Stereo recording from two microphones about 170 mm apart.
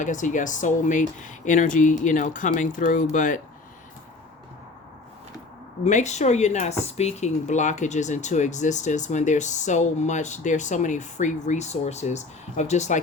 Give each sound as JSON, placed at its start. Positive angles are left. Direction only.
{"t": 0.0, "sound": "speech", "side_deg": 45}
{"t": 5.8, "sound": "speech", "side_deg": 45}